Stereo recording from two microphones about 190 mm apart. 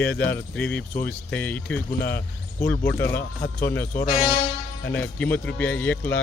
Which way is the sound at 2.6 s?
60° left (ahead or behind).